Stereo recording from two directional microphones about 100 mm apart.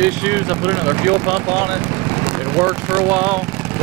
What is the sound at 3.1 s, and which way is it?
Speech, 20° right (ahead or behind).